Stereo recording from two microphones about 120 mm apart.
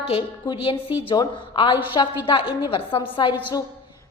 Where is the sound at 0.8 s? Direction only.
15° right (ahead or behind).